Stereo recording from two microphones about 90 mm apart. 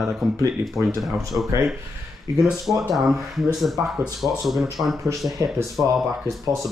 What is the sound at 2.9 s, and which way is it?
Speech, 5° right (ahead or behind).